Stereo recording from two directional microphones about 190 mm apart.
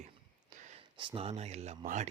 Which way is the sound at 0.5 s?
40° right (ahead or behind).